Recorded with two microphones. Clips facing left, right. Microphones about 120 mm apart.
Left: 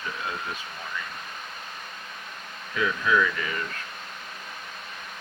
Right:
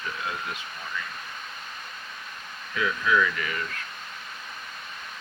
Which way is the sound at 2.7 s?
20° left (ahead or behind).